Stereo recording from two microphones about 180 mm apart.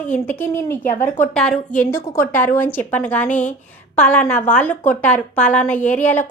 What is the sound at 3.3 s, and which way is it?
Speech, 45° left (ahead or behind).